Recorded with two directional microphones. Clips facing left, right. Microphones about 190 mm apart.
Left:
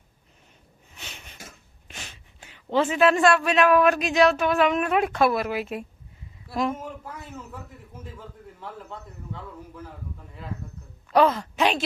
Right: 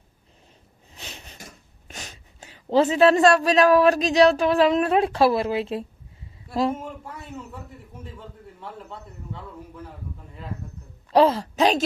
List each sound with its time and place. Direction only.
0.9 s cough: 35° right (ahead or behind)
1.9 s a man's voice: 40° right (ahead or behind)
6.8 s a man's voice: 5° left (ahead or behind)
11.1 s speech: 30° right (ahead or behind)